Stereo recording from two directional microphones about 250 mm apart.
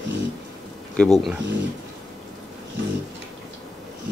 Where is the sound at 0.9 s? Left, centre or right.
Centre.